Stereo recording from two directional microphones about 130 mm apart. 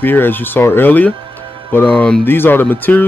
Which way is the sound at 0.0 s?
15° left (ahead or behind).